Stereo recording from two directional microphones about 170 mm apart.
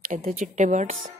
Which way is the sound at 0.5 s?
45° right (ahead or behind).